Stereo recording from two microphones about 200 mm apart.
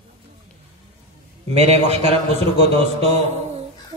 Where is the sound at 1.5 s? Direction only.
35° right (ahead or behind).